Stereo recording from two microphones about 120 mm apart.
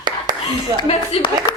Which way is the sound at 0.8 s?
55° left (ahead or behind).